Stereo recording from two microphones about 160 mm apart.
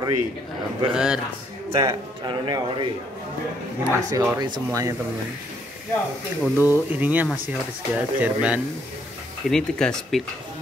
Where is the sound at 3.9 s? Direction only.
20° right (ahead or behind).